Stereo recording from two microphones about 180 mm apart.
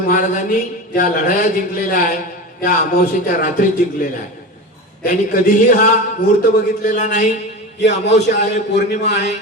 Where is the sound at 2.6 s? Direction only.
50° left (ahead or behind).